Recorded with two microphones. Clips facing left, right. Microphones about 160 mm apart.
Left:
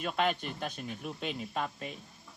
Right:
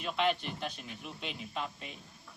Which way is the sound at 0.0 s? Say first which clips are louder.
Left 1 dB; 45° left (ahead or behind).